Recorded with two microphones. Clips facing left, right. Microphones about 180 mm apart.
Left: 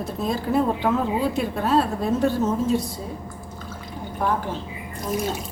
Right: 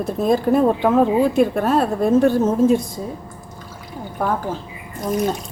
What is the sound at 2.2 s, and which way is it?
Speech, 55° right (ahead or behind).